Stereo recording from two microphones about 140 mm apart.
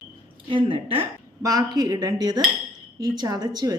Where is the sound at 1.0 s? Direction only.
25° right (ahead or behind).